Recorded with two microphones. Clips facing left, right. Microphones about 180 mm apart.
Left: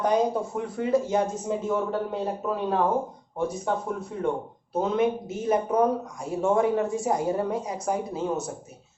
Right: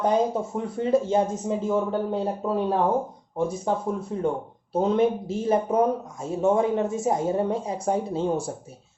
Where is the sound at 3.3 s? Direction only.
30° right (ahead or behind).